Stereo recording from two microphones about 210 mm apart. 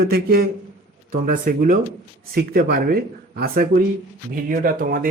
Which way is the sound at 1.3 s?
40° right (ahead or behind).